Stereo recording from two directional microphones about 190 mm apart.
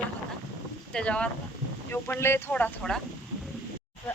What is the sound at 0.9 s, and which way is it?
Speech, 5° left (ahead or behind).